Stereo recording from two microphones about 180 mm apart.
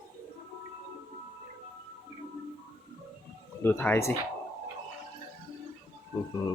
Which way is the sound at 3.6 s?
10° left (ahead or behind).